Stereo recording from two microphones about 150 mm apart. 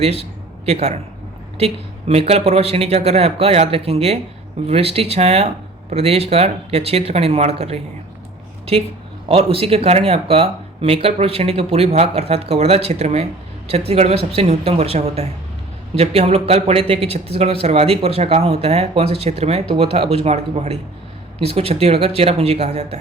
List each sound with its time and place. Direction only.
0.0 s a man's voice: 45° right (ahead or behind)
9.3 s speech: 40° right (ahead or behind)